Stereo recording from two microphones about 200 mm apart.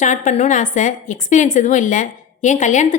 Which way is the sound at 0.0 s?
35° left (ahead or behind).